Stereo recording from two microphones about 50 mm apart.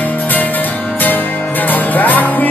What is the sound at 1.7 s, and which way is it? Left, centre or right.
Music, left.